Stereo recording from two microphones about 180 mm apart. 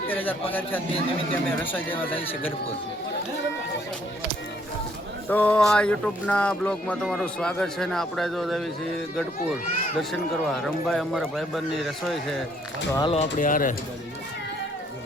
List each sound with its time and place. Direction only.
0.1 s a sound: 10° left (ahead or behind)
1.3 s speech: 10° left (ahead or behind)
2.0 s speech: 30° left (ahead or behind)
5.3 s speech: 10° left (ahead or behind)
10.0 s speech: centre (ahead or behind)
12.9 s speech: 20° left (ahead or behind)
13.4 s speech: 50° left (ahead or behind)